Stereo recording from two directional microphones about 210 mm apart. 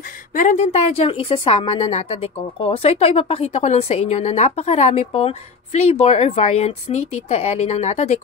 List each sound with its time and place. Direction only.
0.3 s a woman's voice: 40° left (ahead or behind)